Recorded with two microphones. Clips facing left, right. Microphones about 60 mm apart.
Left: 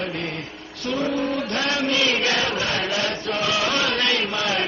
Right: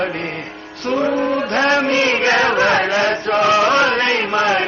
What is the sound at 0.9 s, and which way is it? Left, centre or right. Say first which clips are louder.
Chant: right 6 dB; right.